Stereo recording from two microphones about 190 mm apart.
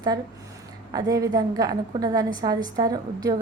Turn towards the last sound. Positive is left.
turn(degrees=-20)  # may be behind; listen again after turning